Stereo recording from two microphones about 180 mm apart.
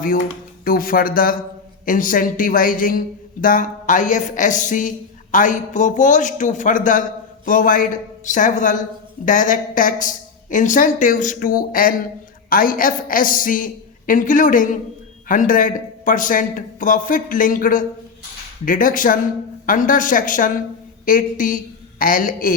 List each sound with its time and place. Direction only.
0.6 s a woman's voice: 50° left (ahead or behind)